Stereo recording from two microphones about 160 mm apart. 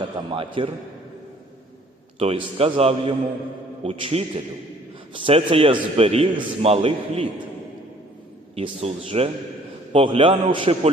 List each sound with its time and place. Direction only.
0.0 s a man's voice: 30° right (ahead or behind)
2.1 s a man's voice: 35° right (ahead or behind)
8.5 s a man's voice: 35° right (ahead or behind)